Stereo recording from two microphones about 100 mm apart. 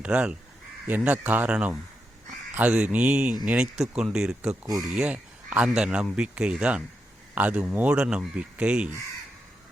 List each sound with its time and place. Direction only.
0.0 s speech: 15° right (ahead or behind)